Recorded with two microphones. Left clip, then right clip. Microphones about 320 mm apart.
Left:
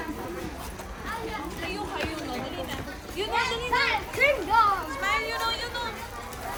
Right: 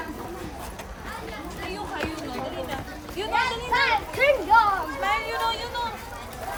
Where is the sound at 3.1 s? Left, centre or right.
Right.